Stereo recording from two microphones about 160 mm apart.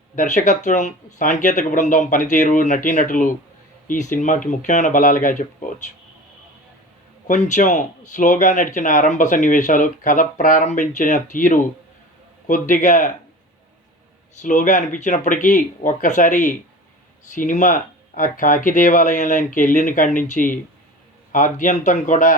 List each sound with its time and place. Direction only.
0.2 s speech: 50° left (ahead or behind)
7.3 s speech: 50° left (ahead or behind)
14.4 s speech: 50° left (ahead or behind)